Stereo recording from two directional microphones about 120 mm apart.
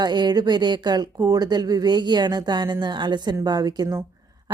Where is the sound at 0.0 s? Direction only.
35° right (ahead or behind).